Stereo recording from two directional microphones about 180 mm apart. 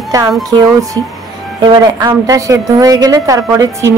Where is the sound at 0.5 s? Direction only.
20° right (ahead or behind).